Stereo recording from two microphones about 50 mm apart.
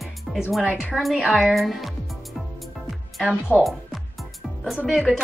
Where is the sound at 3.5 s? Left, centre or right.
Left.